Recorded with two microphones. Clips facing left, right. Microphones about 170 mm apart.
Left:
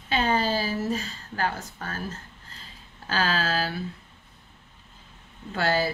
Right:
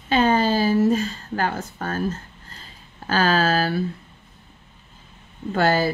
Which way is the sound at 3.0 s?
50° right (ahead or behind).